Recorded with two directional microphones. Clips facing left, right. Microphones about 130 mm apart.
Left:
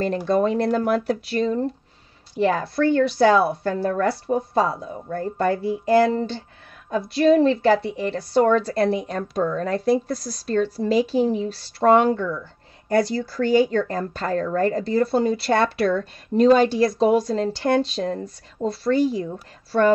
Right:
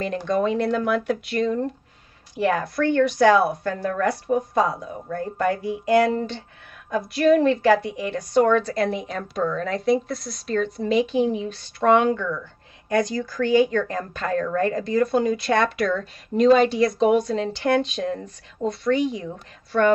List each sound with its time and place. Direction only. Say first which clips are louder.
0.0 s speech: left 2 dB; 35° left (ahead or behind)